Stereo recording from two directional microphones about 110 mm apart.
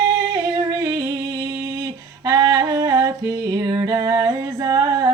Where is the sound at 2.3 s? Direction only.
35° right (ahead or behind).